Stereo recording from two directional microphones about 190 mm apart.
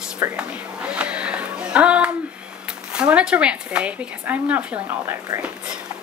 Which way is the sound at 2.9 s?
5° right (ahead or behind).